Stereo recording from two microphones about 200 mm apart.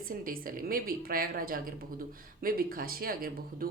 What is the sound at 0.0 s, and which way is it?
A woman's voice, 45° right (ahead or behind).